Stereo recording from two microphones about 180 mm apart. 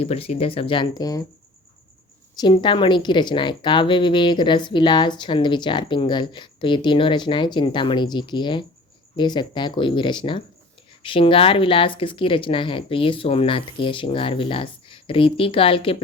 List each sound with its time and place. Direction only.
0.0 s speech: 35° left (ahead or behind)
2.4 s a woman's voice: 25° left (ahead or behind)